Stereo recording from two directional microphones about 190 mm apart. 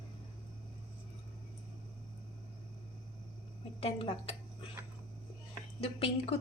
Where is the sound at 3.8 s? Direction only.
30° left (ahead or behind).